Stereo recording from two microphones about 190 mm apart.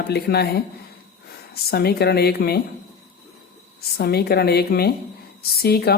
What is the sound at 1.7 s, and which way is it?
Speech, 55° left (ahead or behind).